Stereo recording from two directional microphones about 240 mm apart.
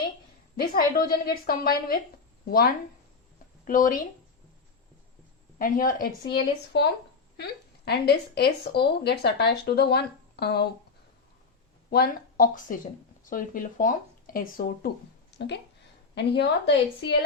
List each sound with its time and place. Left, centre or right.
0.6 s speech: left
5.5 s speech: left
11.9 s speech: left